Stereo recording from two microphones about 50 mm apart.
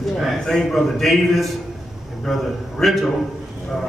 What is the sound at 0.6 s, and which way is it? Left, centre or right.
A man's voice, centre.